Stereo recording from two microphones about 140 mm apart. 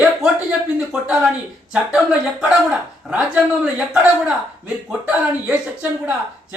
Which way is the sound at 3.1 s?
5° right (ahead or behind).